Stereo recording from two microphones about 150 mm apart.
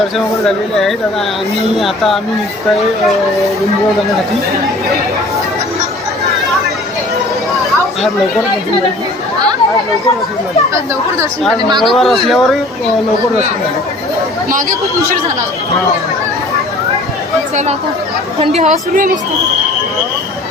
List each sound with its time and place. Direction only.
0.4 s speech: centre (ahead or behind)
11.8 s speech: centre (ahead or behind)
18.3 s speech: 45° right (ahead or behind)